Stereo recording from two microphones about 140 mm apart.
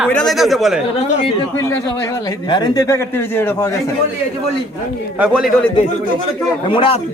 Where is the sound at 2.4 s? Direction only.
30° left (ahead or behind); by 3.7 s 15° left (ahead or behind).